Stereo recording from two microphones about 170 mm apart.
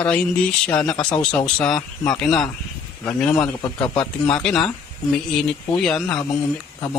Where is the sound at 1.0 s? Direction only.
25° left (ahead or behind).